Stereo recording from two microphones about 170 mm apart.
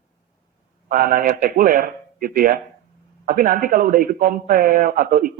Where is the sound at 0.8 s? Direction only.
55° right (ahead or behind).